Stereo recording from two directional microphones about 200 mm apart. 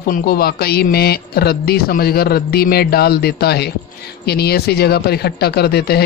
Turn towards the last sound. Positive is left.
turn(degrees=50)  # may be behind; listen again after turning